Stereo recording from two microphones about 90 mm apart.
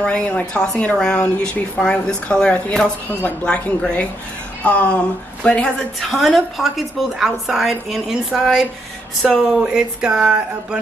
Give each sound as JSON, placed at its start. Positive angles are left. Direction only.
{"t": 0.0, "sound": "speech", "side_deg": 10}
{"t": 3.1, "sound": "a woman's voice", "side_deg": 20}
{"t": 9.6, "sound": "speech", "side_deg": -10}